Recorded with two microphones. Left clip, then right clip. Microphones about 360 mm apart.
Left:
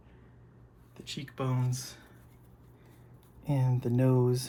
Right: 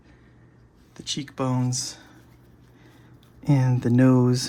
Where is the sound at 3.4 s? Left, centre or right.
Right.